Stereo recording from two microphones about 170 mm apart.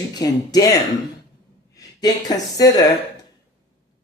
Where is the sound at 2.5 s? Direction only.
20° left (ahead or behind).